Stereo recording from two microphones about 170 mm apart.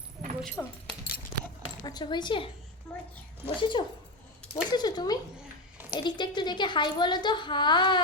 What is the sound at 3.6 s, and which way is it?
Speech, 30° left (ahead or behind).